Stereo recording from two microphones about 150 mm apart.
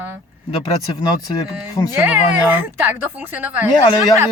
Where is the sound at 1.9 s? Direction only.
10° right (ahead or behind).